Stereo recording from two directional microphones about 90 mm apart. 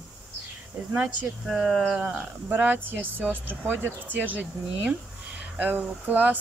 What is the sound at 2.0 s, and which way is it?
Speech, 20° right (ahead or behind).